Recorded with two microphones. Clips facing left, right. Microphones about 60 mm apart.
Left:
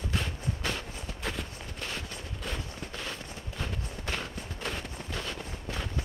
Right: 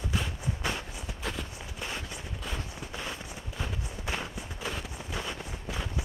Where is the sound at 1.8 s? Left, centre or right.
Centre.